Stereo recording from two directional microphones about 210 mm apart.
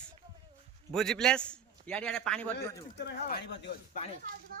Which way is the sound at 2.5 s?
55° left (ahead or behind).